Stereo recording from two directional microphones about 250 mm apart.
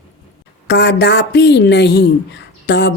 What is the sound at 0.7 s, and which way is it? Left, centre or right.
Speech, left.